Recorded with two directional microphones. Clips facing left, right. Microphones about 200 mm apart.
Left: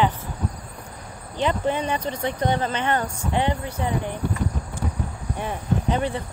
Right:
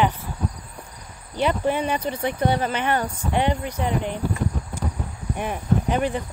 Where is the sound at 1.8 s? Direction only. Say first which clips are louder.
Right 1 dB; 10° right (ahead or behind).